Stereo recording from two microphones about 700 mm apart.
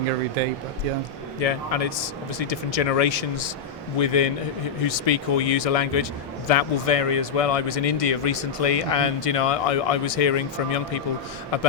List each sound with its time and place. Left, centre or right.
0.4 s speech: right
1.4 s speech: left